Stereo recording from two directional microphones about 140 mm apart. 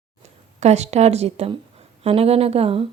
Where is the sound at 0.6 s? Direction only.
50° right (ahead or behind).